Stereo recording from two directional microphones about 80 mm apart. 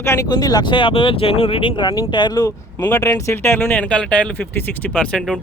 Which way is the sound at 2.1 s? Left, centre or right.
Left.